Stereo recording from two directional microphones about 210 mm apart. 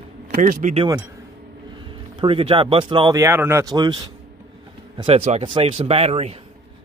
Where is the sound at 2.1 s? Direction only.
25° right (ahead or behind).